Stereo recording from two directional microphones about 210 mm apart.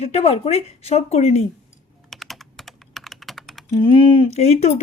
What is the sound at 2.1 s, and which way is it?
Typing, centre (ahead or behind).